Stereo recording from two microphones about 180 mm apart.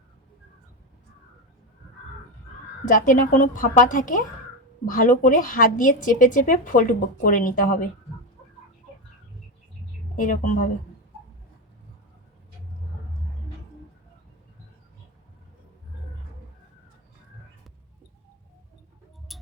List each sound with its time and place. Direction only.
2.8 s a woman's voice: 45° left (ahead or behind)
10.2 s a woman's voice: 45° left (ahead or behind)
19.3 s a sound: centre (ahead or behind)